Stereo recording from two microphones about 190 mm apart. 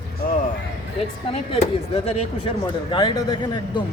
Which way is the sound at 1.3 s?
35° left (ahead or behind).